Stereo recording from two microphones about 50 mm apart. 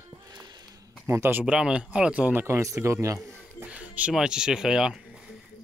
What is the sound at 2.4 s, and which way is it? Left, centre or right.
A man's voice, right.